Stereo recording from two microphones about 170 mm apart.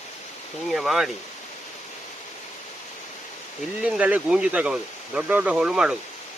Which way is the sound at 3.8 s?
10° right (ahead or behind).